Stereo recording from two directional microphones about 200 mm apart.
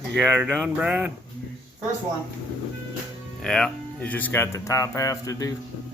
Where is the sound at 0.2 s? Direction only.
10° right (ahead or behind).